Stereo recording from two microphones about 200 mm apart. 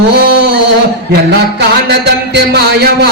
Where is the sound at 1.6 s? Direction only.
55° right (ahead or behind).